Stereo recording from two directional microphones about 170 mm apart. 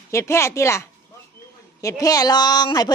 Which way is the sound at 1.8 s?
20° left (ahead or behind).